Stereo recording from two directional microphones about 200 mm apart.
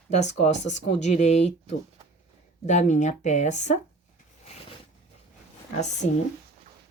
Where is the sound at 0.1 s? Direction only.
35° left (ahead or behind).